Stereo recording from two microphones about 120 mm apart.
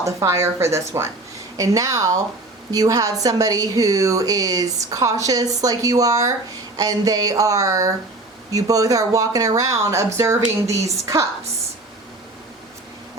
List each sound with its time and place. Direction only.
0.0 s a woman's voice: 25° right (ahead or behind)